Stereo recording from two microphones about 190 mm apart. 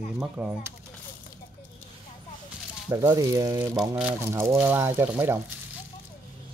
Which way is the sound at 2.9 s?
15° right (ahead or behind).